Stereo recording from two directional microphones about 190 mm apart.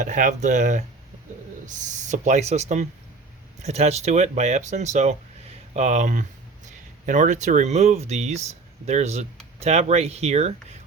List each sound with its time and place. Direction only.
0.0 s speech: 40° right (ahead or behind)